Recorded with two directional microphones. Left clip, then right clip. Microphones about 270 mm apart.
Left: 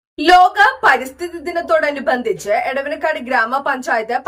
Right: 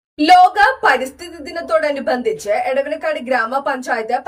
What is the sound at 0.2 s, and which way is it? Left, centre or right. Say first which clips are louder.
A woman's voice: even; centre.